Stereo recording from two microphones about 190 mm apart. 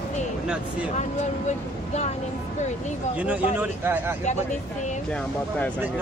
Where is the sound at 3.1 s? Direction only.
5° right (ahead or behind).